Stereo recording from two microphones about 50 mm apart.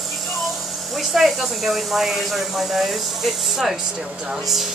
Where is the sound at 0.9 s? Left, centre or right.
Centre.